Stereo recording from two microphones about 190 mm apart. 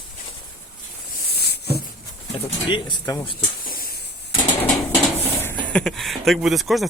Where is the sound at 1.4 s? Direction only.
60° left (ahead or behind).